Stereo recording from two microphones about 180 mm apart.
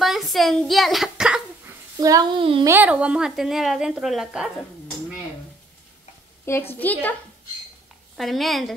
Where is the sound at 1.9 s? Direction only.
20° right (ahead or behind); by 4.5 s centre (ahead or behind).